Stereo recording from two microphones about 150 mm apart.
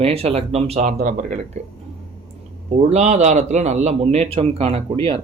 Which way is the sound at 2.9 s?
50° right (ahead or behind).